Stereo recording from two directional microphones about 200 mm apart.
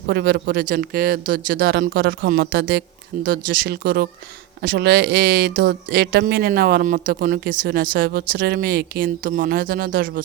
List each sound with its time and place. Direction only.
0.1 s speech: 55° right (ahead or behind)